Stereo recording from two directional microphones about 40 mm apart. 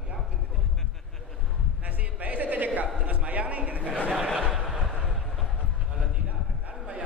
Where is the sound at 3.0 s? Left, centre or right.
Right.